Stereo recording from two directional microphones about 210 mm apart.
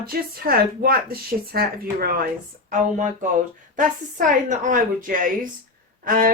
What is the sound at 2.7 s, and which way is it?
A woman's voice, 35° right (ahead or behind).